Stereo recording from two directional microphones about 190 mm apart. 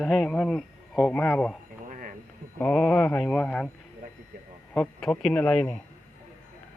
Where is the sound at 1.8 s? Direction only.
45° right (ahead or behind).